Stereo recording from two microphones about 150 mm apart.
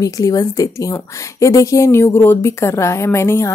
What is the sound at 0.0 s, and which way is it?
A woman's voice, 25° left (ahead or behind).